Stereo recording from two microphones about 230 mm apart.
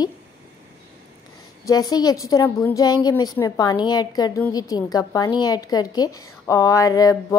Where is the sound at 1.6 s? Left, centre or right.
Centre.